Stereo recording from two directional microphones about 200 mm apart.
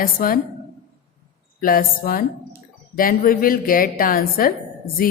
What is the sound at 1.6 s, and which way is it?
A woman's voice, 45° left (ahead or behind).